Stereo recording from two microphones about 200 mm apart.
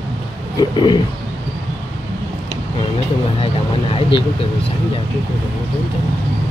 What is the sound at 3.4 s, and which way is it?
Vehicle, 25° left (ahead or behind).